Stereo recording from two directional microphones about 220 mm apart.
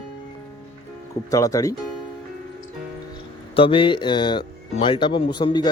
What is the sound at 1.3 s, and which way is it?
Speech, 15° left (ahead or behind).